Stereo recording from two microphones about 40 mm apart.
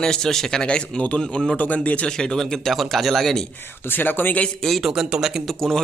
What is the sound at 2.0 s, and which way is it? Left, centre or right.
A man's voice, centre.